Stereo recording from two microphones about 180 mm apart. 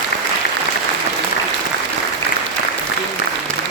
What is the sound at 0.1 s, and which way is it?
Applause, 60° left (ahead or behind).